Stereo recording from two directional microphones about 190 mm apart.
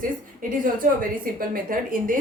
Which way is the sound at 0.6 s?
45° right (ahead or behind).